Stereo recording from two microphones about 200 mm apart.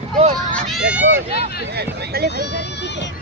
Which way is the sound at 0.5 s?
Centre (ahead or behind).